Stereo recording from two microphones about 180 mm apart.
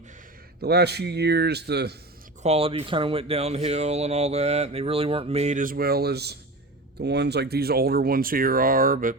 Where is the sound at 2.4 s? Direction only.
35° right (ahead or behind); by 9.1 s 50° right (ahead or behind).